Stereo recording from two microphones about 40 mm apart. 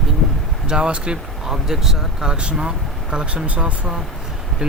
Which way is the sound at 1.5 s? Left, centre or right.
Centre.